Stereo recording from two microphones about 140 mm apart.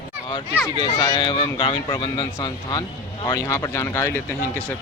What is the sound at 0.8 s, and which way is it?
Speech, 30° left (ahead or behind).